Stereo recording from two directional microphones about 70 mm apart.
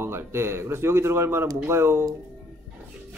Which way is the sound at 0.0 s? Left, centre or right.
Right.